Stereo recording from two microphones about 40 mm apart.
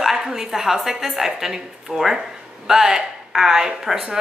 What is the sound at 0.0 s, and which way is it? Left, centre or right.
A woman's voice, centre.